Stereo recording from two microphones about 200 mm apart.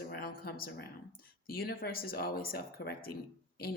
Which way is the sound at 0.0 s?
50° left (ahead or behind).